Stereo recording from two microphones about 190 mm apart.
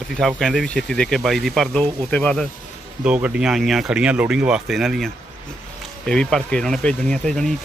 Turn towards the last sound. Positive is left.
turn(degrees=5)  # may be behind; listen again after turning